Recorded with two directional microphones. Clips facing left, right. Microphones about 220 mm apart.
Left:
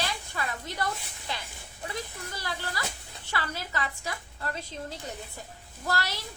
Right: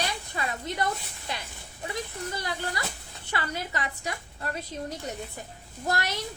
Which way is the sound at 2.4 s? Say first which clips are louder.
Even; 20° right (ahead or behind).